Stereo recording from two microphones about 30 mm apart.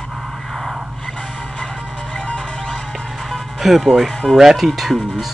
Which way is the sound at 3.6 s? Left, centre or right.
Centre.